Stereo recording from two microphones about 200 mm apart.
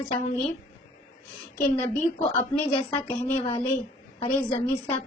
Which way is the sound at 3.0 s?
30° left (ahead or behind).